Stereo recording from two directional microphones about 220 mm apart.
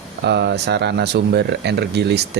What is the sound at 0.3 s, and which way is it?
Speech, 50° right (ahead or behind).